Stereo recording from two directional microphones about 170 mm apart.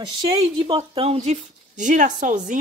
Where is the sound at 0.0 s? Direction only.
30° right (ahead or behind).